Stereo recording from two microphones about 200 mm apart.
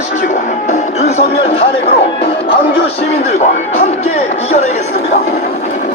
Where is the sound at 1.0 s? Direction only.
30° left (ahead or behind).